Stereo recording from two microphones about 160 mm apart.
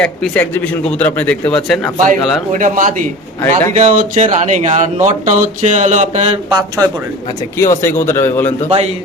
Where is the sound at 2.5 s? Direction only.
55° right (ahead or behind).